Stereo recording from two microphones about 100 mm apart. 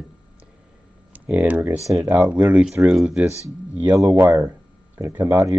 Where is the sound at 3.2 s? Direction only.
30° right (ahead or behind).